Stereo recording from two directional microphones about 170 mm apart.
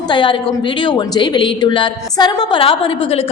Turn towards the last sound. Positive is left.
turn(degrees=35)  # may be behind; listen again after turning